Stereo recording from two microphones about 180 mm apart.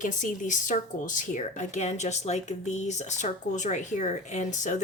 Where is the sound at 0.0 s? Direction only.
45° left (ahead or behind).